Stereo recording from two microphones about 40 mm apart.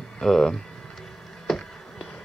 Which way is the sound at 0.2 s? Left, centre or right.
Centre.